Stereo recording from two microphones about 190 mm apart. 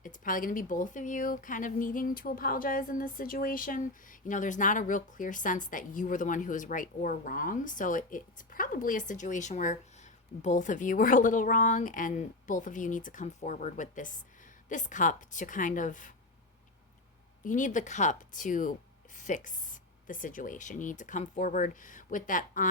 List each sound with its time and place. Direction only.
0.0 s a woman's voice: 45° left (ahead or behind)
17.4 s a woman's voice: 40° left (ahead or behind)